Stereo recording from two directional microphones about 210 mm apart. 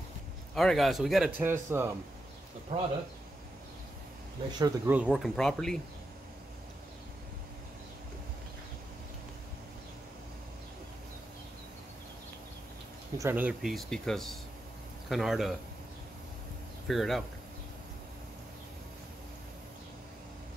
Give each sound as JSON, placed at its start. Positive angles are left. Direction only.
{"t": 0.6, "sound": "a man's voice", "side_deg": 0}
{"t": 2.7, "sound": "speech", "side_deg": -30}
{"t": 4.6, "sound": "speech", "side_deg": -15}
{"t": 4.9, "sound": "a man's voice", "side_deg": -5}
{"t": 13.2, "sound": "a man's voice", "side_deg": -10}
{"t": 16.8, "sound": "a man's voice", "side_deg": 0}